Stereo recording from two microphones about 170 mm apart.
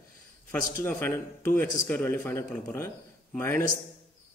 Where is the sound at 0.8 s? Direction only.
10° left (ahead or behind).